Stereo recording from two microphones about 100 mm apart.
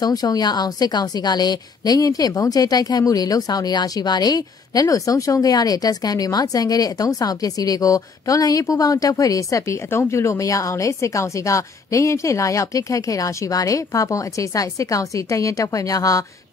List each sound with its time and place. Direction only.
0.0 s a woman's voice: 40° left (ahead or behind)